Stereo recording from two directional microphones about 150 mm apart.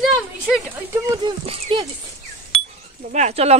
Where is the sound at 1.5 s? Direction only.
35° right (ahead or behind).